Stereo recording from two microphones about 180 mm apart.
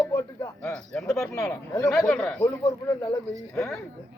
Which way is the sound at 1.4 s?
15° left (ahead or behind).